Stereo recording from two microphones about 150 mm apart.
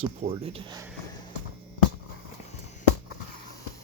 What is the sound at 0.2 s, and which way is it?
Speech, 55° right (ahead or behind).